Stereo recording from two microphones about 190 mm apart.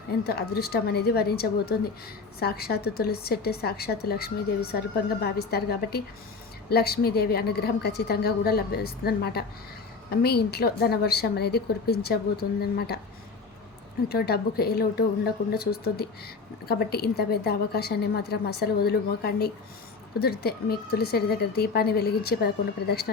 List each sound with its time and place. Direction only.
0.3 s a woman's voice: 55° left (ahead or behind)
14.1 s a woman's voice: 55° left (ahead or behind)